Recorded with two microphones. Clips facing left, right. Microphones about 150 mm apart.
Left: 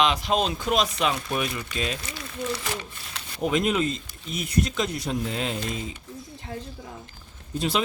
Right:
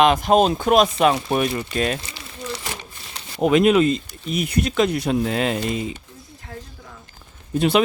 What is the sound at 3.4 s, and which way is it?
Speech, 65° right (ahead or behind).